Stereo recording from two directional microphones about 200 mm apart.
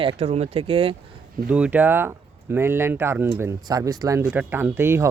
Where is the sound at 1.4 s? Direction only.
10° right (ahead or behind).